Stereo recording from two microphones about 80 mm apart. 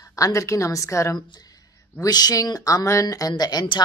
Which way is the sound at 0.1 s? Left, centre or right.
Left.